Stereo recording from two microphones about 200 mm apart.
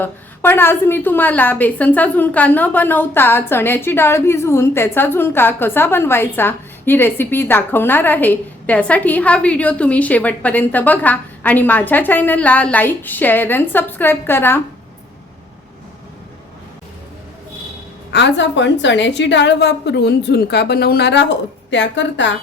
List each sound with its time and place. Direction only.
0.0 s a woman's voice: 10° left (ahead or behind)
18.1 s a woman's voice: 60° left (ahead or behind)